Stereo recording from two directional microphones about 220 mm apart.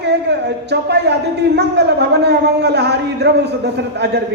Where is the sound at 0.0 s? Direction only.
50° right (ahead or behind).